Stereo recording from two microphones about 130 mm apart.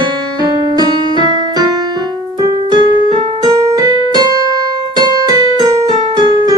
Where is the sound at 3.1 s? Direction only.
35° right (ahead or behind).